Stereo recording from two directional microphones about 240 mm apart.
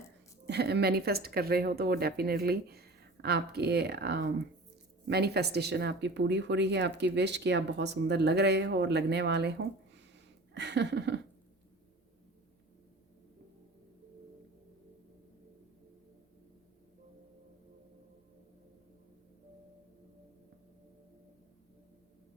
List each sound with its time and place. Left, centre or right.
0.4 s speech: right